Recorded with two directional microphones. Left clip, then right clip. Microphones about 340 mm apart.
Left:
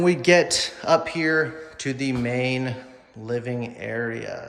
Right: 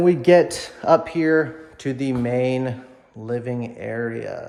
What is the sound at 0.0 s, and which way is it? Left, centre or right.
Speech, centre.